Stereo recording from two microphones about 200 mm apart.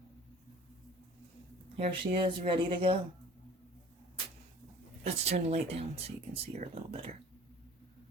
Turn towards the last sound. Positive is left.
turn(degrees=-30)  # may be behind; listen again after turning